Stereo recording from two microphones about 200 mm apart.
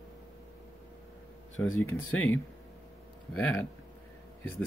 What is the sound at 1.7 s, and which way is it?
Speech, 90° left.